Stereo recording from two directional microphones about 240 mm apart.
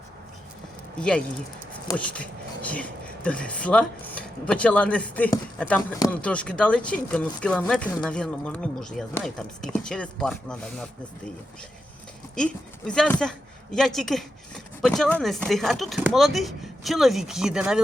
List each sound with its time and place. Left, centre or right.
0.9 s speech: centre
3.2 s speech: centre
12.4 s speech: centre